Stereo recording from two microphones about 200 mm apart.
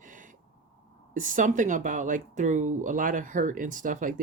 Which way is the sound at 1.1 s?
40° right (ahead or behind).